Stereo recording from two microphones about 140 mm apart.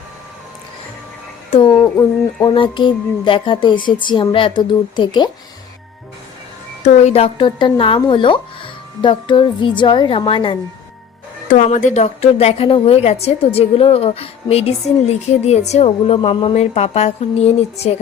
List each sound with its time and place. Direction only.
1.5 s speech: 45° left (ahead or behind)
1.8 s speech: 25° left (ahead or behind)
6.8 s speech: 50° left (ahead or behind)
11.4 s a woman's voice: 65° left (ahead or behind)